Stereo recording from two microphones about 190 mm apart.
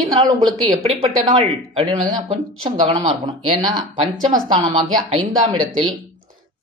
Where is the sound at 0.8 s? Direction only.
30° right (ahead or behind).